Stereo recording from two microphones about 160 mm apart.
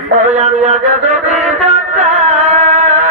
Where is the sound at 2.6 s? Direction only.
45° right (ahead or behind).